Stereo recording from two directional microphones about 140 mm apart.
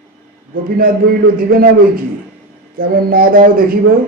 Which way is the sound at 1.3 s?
90° right.